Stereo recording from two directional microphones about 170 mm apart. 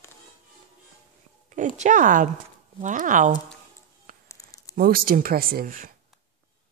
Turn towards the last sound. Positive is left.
turn(degrees=-55)  # may be behind; listen again after turning